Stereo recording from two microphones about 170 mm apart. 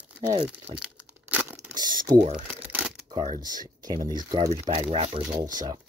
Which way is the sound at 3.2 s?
50° right (ahead or behind).